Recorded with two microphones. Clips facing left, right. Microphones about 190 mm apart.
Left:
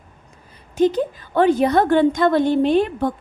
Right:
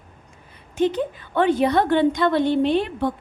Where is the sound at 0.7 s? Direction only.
40° left (ahead or behind).